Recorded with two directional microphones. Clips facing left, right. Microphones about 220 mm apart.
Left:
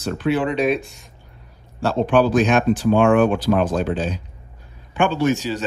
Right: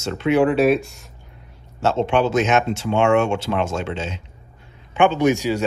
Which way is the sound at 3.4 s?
25° right (ahead or behind).